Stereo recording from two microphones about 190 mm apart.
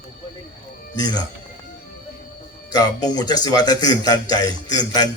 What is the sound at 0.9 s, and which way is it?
Speech, 20° left (ahead or behind).